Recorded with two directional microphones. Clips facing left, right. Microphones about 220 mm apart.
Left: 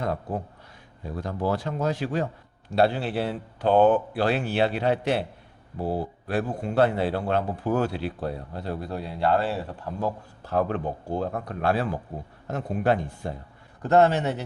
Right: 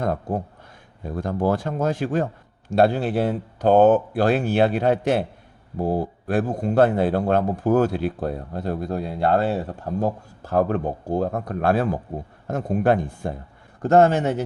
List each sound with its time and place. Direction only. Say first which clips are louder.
0.0 s a man's voice: right 4 dB; 50° right (ahead or behind)